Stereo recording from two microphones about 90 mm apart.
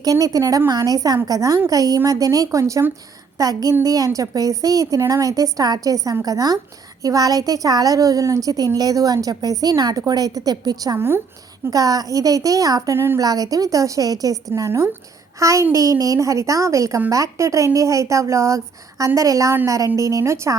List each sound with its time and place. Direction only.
0.0 s a woman's voice: 40° right (ahead or behind)
10.9 s speech: 25° right (ahead or behind)
11.7 s a woman's voice: 40° right (ahead or behind)